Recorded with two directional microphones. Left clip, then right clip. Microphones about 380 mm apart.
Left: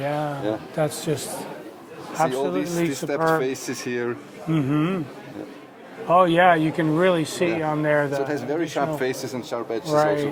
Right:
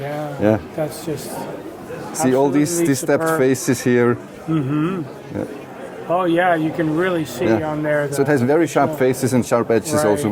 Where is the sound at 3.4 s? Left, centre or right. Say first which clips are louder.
Right 9 dB; right.